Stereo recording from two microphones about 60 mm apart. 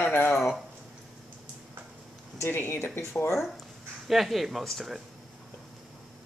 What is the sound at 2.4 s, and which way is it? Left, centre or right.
Speech, left.